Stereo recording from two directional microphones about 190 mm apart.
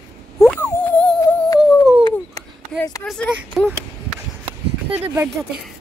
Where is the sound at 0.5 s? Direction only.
10° left (ahead or behind).